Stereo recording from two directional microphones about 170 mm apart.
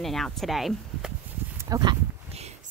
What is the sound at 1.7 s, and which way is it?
Speech, 20° right (ahead or behind).